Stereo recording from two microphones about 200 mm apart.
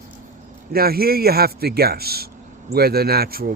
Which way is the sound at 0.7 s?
50° right (ahead or behind).